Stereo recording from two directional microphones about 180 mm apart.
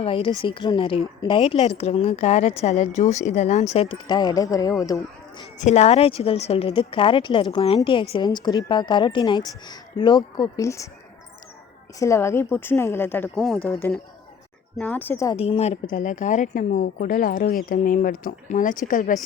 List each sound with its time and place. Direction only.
0.0 s a woman's voice: 30° left (ahead or behind)
5.6 s a woman's voice: 35° left (ahead or behind); by 10.8 s 15° left (ahead or behind)
11.9 s a woman's voice: 15° left (ahead or behind); by 13.7 s centre (ahead or behind)
14.8 s a woman's voice: 10° left (ahead or behind)
15.4 s a woman's voice: 35° left (ahead or behind)